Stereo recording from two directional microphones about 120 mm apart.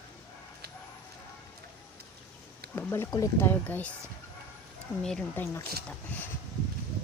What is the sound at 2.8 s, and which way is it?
Speech, 20° left (ahead or behind).